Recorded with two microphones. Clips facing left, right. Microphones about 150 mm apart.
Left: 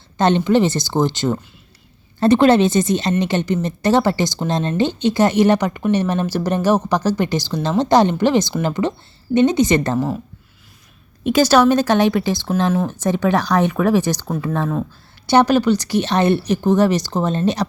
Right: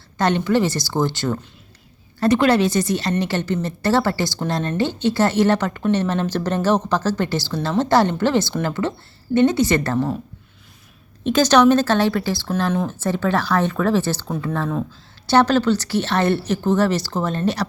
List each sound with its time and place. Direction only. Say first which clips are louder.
0.2 s a woman's voice: left 3 dB; 25° left (ahead or behind)
11.2 s speech: left 1 dB; 10° left (ahead or behind)